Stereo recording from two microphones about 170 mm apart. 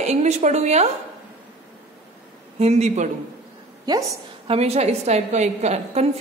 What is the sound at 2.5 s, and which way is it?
Speech, 40° right (ahead or behind).